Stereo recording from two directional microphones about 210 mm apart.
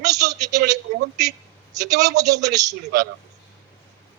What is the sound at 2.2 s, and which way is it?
Speech, 15° right (ahead or behind).